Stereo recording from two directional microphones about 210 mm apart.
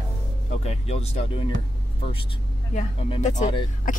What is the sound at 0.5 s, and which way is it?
Speech, 30° left (ahead or behind).